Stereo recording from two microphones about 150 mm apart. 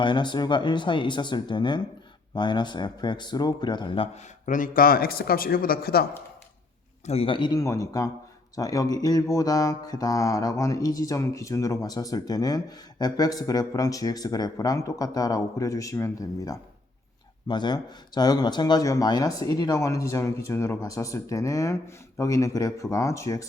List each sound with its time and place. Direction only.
0.0 s speech: 30° left (ahead or behind)
4.4 s speech: 60° left (ahead or behind); by 6.1 s 90° left
7.0 s speech: 45° left (ahead or behind)
7.6 s speech: 20° left (ahead or behind)